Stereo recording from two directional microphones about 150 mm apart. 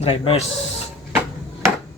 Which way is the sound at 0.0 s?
40° left (ahead or behind).